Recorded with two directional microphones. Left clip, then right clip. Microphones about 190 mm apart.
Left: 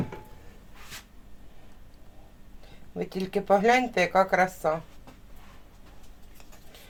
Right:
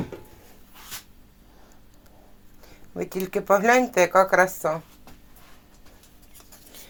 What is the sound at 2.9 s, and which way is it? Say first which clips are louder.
Speech: right 3 dB; 40° right (ahead or behind).